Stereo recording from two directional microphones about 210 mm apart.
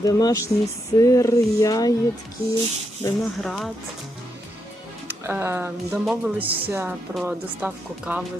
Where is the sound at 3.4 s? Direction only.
Centre (ahead or behind).